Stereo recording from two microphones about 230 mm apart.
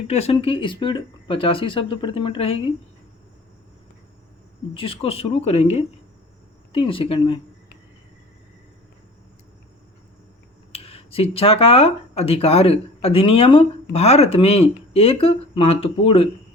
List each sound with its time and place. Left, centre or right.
0.1 s speech: left
4.7 s speech: left
10.7 s speech: left